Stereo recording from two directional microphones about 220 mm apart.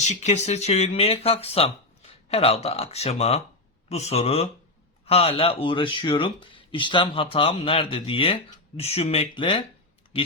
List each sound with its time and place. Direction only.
0.0 s speech: 30° left (ahead or behind)